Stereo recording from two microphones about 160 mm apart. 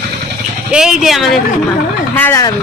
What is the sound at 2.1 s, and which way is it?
Speech, 10° left (ahead or behind).